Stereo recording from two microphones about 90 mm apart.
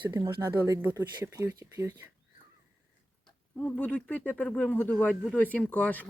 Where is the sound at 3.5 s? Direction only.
20° left (ahead or behind).